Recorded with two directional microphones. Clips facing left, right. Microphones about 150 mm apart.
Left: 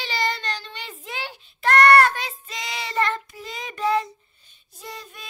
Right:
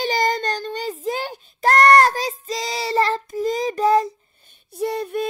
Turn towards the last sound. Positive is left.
turn(degrees=-55)  # may be behind; listen again after turning